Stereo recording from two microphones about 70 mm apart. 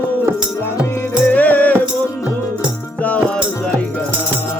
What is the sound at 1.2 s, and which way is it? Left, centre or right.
Music, left.